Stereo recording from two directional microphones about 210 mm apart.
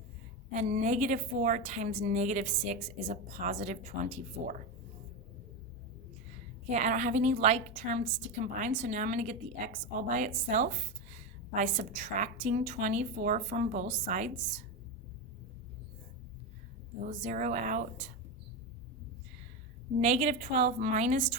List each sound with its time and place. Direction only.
0.5 s a woman's voice: 35° right (ahead or behind)
6.7 s a woman's voice: 35° right (ahead or behind)
17.2 s a woman's voice: 35° right (ahead or behind)
20.0 s a woman's voice: 35° right (ahead or behind)